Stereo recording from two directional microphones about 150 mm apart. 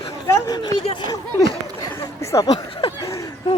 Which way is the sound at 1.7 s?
20° left (ahead or behind).